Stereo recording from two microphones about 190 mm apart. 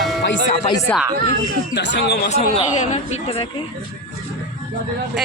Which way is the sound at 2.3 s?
35° left (ahead or behind).